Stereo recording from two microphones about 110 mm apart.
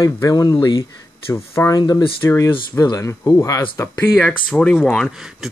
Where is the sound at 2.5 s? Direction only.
50° left (ahead or behind).